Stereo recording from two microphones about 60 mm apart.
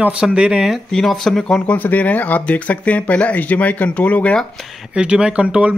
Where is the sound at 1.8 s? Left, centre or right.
Left.